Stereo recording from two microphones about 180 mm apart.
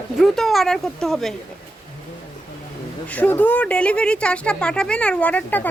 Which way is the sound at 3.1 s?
10° left (ahead or behind).